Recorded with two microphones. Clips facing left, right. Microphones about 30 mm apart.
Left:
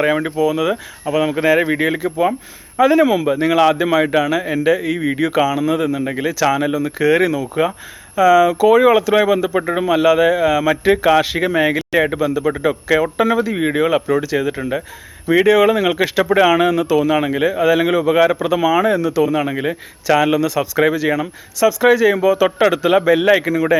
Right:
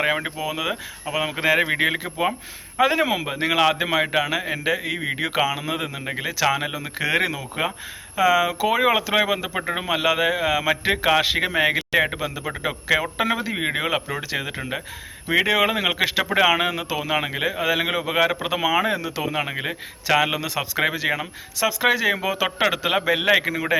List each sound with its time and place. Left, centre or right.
0.0 s a man's voice: centre
9.6 s a man's voice: centre
9.8 s a man's voice: right